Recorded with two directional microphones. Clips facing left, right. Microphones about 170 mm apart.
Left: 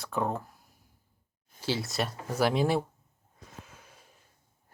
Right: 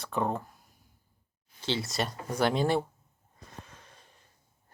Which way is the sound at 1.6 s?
5° left (ahead or behind).